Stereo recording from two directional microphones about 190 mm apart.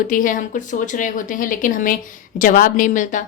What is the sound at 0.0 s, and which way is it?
Speech, 45° left (ahead or behind).